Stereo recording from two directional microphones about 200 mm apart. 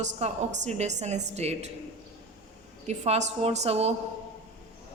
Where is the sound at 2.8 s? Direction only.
35° right (ahead or behind).